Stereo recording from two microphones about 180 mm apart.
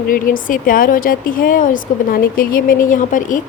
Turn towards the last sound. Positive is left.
turn(degrees=45)  # may be behind; listen again after turning